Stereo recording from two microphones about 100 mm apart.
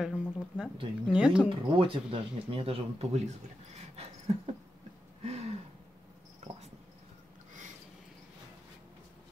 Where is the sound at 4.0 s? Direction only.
90° right.